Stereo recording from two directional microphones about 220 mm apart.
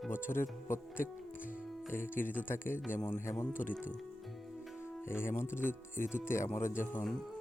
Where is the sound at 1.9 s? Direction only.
10° left (ahead or behind).